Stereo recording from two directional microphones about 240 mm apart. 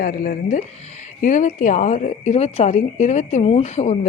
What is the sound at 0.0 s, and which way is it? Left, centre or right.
A woman's voice, left.